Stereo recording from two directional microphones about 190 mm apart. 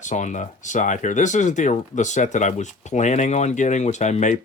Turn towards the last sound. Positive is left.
turn(degrees=40)  # may be behind; listen again after turning